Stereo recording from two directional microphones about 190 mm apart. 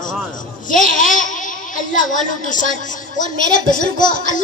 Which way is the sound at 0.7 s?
45° left (ahead or behind).